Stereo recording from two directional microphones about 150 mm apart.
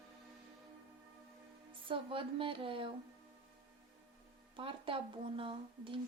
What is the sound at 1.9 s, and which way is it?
Speech, 35° right (ahead or behind).